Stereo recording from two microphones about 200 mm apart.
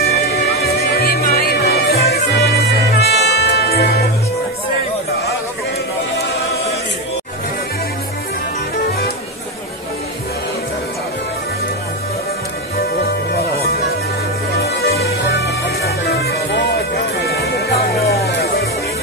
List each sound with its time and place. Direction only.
0.0 s music: 50° left (ahead or behind)
14.6 s music: 50° left (ahead or behind)